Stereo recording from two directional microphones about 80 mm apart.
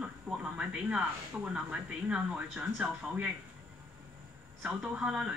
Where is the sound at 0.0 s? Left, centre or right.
Centre.